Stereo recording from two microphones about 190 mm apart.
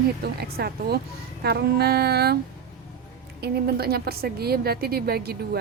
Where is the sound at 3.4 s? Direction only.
55° right (ahead or behind).